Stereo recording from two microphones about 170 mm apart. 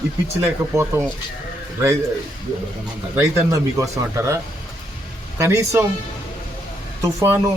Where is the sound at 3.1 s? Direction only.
15° right (ahead or behind).